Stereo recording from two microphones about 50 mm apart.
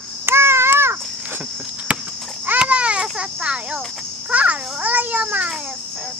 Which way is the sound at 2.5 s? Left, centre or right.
Right.